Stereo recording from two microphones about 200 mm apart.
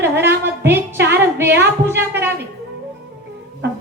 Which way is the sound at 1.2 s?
10° right (ahead or behind).